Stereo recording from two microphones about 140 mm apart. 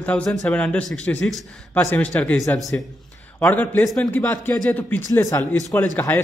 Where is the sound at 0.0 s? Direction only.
10° left (ahead or behind).